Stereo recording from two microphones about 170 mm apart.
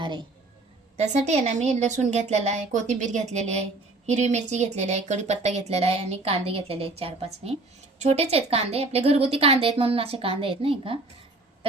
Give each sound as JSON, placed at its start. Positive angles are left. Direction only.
{"t": 0.9, "sound": "speech", "side_deg": -40}